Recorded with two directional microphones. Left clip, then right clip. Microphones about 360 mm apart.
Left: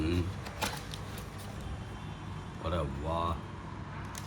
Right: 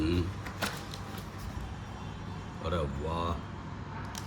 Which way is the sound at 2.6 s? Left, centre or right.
Centre.